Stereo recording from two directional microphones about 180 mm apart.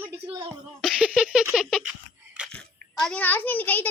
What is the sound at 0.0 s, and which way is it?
Cough, 10° right (ahead or behind).